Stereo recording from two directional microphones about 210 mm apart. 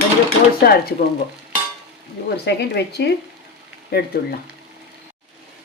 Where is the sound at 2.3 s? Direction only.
50° left (ahead or behind).